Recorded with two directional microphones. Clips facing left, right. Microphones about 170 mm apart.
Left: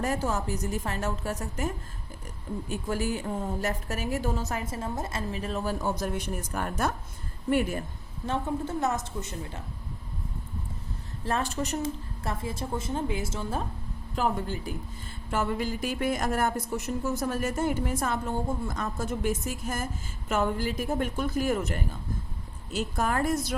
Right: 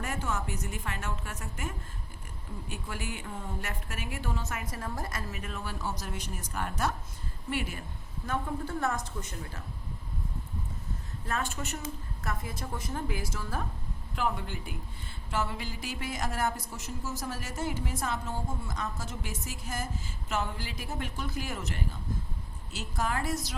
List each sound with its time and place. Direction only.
0.0 s a woman's voice: 35° left (ahead or behind)
4.6 s a woman's voice: 25° left (ahead or behind)
5.8 s speech: 50° left (ahead or behind)
8.3 s a woman's voice: 20° left (ahead or behind)
11.3 s a woman's voice: 35° left (ahead or behind)
14.2 s a woman's voice: 40° left (ahead or behind)
15.3 s speech: 50° left (ahead or behind)